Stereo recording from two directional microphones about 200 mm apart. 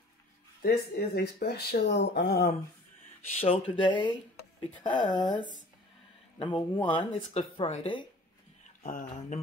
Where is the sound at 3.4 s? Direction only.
30° left (ahead or behind).